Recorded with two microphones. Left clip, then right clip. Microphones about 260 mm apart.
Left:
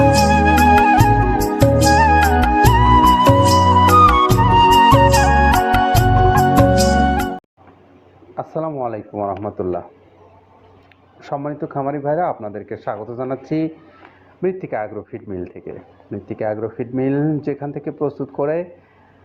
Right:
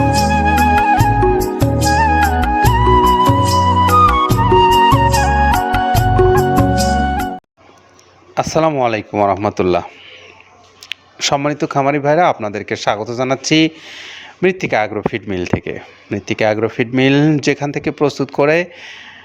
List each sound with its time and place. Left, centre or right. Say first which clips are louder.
0.0 s music: left 1 dB; centre
8.4 s speech: right 9 dB; right
11.3 s speech: right 8 dB; right
12.6 s speech: right 10 dB; right
14.4 s speech: right 7 dB; right
18.0 s speech: right 7 dB; right